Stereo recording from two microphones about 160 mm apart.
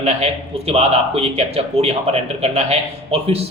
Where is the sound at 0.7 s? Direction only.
40° right (ahead or behind).